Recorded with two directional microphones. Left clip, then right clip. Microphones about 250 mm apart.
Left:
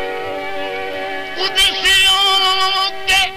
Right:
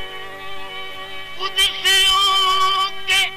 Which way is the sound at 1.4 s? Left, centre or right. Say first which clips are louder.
Left 4 dB; left.